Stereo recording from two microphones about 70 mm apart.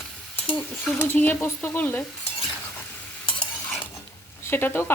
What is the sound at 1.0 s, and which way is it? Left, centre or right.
Stir, left.